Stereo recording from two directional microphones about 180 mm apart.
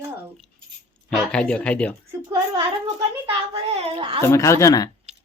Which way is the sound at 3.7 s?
30° right (ahead or behind).